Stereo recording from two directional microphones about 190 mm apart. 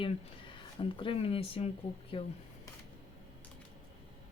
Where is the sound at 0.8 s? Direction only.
25° left (ahead or behind).